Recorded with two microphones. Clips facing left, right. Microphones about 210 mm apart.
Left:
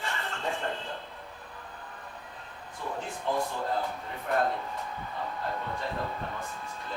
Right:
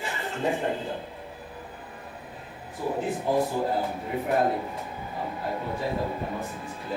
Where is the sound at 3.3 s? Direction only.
30° right (ahead or behind).